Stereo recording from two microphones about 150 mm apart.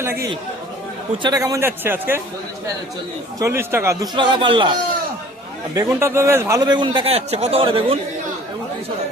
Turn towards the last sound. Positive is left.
turn(degrees=-35)  # may be behind; listen again after turning